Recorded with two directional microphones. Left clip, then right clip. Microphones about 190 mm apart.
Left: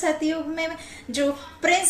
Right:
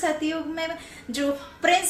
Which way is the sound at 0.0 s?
15° right (ahead or behind).